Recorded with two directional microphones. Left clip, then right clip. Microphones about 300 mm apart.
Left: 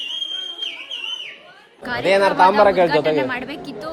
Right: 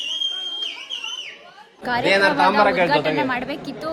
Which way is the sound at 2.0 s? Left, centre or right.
Left.